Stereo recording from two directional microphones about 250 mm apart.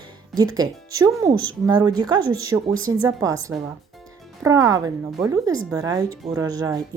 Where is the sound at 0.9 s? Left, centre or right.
Centre.